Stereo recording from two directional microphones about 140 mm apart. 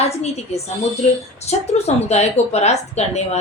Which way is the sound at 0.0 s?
50° left (ahead or behind).